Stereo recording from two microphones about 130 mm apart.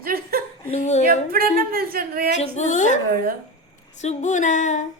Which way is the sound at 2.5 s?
70° left (ahead or behind).